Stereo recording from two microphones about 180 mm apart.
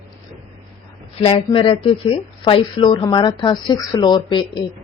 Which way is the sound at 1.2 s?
30° left (ahead or behind).